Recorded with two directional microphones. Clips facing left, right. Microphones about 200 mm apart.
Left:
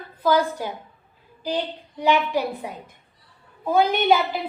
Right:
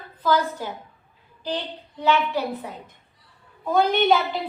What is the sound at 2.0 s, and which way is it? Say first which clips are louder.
A woman's voice: left 1 dB; 15° left (ahead or behind).